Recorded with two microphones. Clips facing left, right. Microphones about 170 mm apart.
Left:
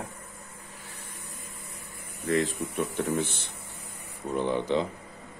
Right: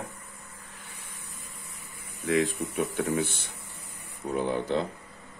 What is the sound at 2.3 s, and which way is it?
Speech, centre (ahead or behind).